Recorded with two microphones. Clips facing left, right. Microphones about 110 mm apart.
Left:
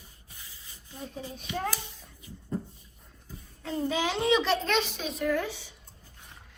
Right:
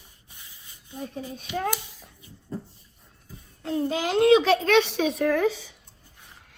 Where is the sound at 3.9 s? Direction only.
50° right (ahead or behind); by 5.4 s 85° right.